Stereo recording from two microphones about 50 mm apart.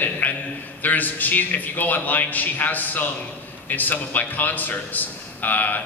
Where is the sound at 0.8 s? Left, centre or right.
Left.